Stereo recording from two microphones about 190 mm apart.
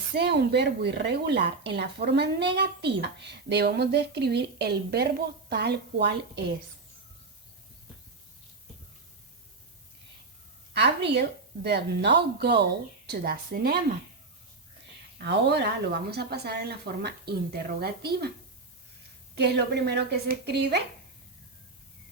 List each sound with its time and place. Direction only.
0.1 s speech: 60° right (ahead or behind)
10.8 s a woman's voice: 65° right (ahead or behind)
15.2 s speech: 60° right (ahead or behind)
19.4 s speech: 60° right (ahead or behind)